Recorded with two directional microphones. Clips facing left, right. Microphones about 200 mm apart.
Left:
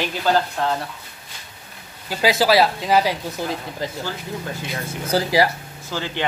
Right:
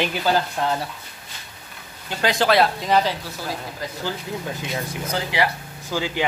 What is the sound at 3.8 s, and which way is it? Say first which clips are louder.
Speech: left 5 dB; 25° left (ahead or behind).